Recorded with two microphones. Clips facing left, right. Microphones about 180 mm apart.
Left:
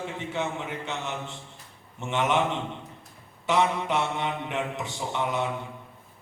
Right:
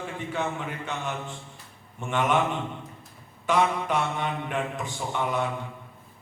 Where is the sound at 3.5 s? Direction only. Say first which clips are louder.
Even; 20° left (ahead or behind).